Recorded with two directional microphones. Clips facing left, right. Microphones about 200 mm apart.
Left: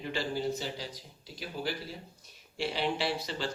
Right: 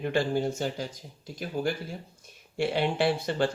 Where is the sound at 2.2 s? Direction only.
50° right (ahead or behind).